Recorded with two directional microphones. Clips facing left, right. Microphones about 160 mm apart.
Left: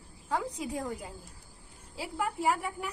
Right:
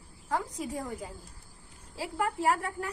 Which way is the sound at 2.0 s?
10° left (ahead or behind).